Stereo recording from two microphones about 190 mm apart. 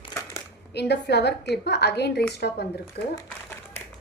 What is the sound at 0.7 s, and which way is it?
A woman's voice, 60° left (ahead or behind).